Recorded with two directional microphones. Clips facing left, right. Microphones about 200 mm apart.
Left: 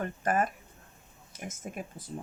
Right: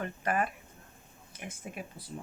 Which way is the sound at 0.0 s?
45° left (ahead or behind).